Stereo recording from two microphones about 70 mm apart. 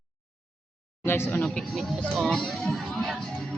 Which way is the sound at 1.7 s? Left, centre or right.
Centre.